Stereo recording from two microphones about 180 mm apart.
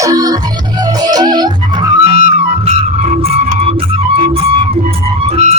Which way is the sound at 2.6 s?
35° right (ahead or behind).